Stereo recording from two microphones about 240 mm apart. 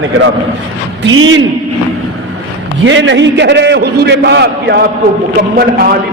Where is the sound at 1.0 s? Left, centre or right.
Right.